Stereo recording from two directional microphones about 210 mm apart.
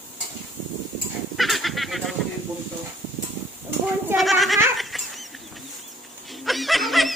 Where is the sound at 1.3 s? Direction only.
Centre (ahead or behind).